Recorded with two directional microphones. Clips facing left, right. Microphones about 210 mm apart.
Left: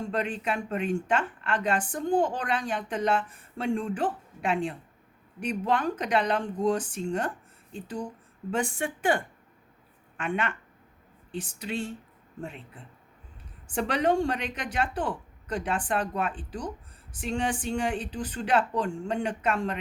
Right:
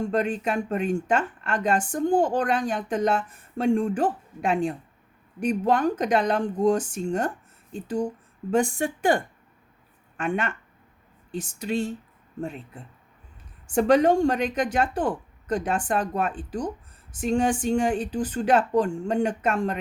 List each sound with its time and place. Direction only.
0.1 s a woman's voice: 45° right (ahead or behind)
13.7 s a woman's voice: 45° right (ahead or behind)